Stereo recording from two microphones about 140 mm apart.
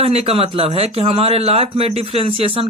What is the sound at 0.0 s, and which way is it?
A man's voice, 45° right (ahead or behind).